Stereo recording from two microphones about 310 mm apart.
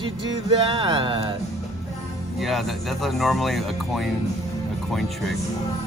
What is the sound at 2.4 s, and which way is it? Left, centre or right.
Speech, centre.